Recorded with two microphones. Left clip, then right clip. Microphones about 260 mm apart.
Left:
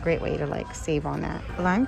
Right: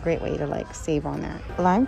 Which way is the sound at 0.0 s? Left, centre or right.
Centre.